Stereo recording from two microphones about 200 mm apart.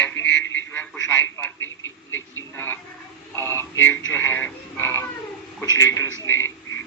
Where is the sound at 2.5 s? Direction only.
10° left (ahead or behind).